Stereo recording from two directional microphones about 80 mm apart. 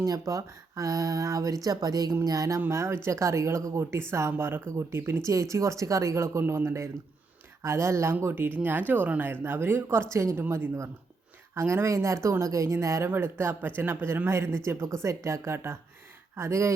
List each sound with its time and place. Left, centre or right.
0.0 s speech: right
2.6 s speech: right
13.1 s speech: right